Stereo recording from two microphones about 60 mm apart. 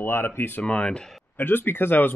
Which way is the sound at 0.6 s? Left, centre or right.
Centre.